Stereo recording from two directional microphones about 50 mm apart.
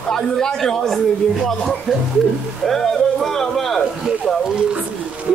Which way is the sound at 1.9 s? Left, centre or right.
Centre.